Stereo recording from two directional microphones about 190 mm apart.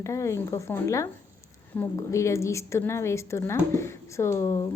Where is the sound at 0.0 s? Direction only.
15° left (ahead or behind).